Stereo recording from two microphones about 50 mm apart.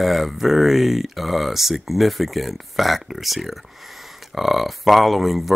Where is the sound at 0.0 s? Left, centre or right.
Centre.